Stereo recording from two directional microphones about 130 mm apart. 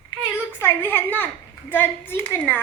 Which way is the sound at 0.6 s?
15° left (ahead or behind).